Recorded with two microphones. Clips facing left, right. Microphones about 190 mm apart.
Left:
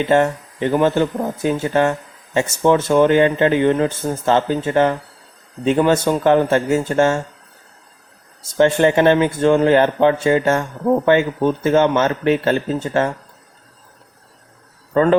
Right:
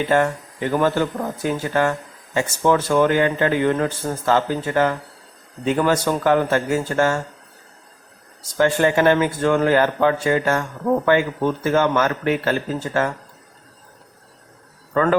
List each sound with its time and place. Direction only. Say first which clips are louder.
0.0 s a man's voice: left 3 dB; 25° left (ahead or behind)
8.4 s a man's voice: left 4 dB; 25° left (ahead or behind)
14.9 s a man's voice: left 4 dB; 25° left (ahead or behind)